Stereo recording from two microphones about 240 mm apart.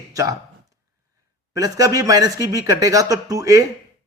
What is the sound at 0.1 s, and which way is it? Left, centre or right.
Speech, centre.